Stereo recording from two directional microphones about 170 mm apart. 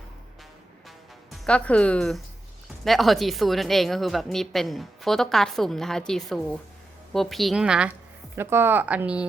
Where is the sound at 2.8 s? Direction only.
Centre (ahead or behind).